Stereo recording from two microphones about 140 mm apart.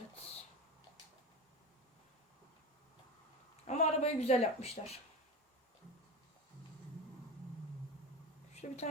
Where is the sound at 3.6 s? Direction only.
50° left (ahead or behind).